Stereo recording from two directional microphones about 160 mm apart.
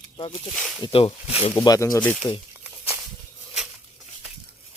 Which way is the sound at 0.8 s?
35° left (ahead or behind).